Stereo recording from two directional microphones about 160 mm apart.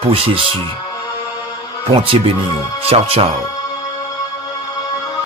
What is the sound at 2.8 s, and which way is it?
Speech, 40° right (ahead or behind).